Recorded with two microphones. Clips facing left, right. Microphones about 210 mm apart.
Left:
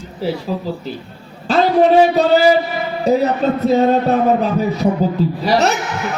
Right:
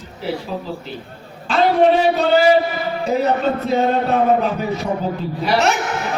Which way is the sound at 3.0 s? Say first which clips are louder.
Left 3 dB; 40° left (ahead or behind).